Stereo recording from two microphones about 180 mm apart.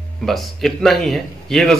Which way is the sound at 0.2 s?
Centre (ahead or behind).